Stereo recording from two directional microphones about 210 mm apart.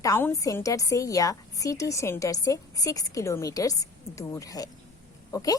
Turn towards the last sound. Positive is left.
turn(degrees=15)  # may be behind; listen again after turning